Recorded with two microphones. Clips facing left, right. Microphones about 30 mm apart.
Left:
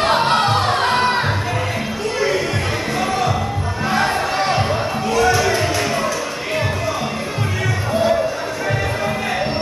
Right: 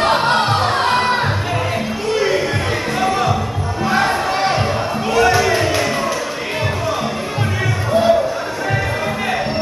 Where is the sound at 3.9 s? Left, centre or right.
Centre.